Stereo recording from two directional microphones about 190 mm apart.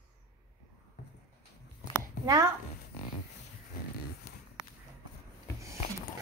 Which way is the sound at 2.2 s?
20° right (ahead or behind).